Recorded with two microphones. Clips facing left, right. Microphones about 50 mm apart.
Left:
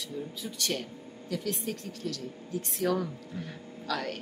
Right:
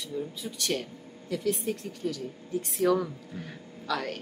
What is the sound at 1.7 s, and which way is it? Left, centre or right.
Speech, centre.